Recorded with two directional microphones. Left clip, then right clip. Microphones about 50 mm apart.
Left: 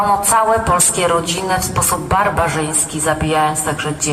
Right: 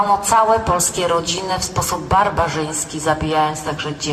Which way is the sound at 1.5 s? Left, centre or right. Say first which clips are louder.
Left 3 dB; left.